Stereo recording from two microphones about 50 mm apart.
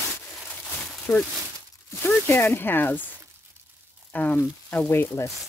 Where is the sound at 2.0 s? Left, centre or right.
Left.